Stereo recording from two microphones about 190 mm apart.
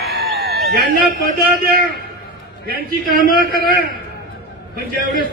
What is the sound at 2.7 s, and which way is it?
Speech, 50° right (ahead or behind).